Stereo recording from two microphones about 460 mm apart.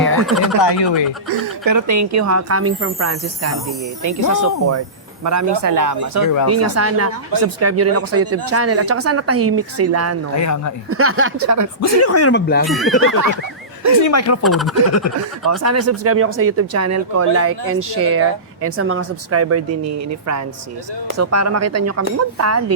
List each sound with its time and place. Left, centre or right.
0.6 s speech: left
1.3 s speech: right
6.2 s speech: left
6.5 s speech: right
10.3 s speech: left
10.8 s speech: right
11.8 s speech: left
12.6 s speech: centre
14.0 s speech: left
14.4 s speech: centre
15.1 s speech: left
15.4 s speech: right